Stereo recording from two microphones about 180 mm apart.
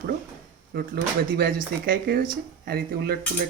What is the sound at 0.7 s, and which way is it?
Speech, 60° right (ahead or behind).